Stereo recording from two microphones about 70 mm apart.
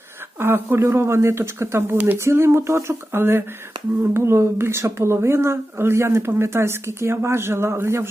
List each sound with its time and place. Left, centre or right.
0.3 s speech: right